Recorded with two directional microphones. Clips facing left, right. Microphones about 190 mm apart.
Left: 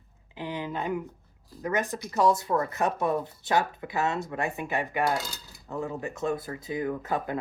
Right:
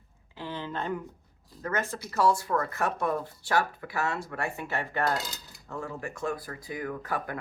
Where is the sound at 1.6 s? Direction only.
15° left (ahead or behind).